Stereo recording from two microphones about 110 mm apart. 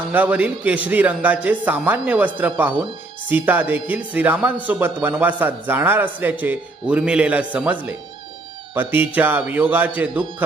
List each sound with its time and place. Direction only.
0.1 s speech: 15° right (ahead or behind)